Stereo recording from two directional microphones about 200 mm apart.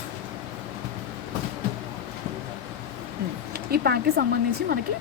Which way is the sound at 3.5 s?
50° right (ahead or behind).